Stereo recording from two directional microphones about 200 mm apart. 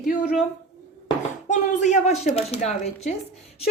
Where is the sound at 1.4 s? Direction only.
35° left (ahead or behind).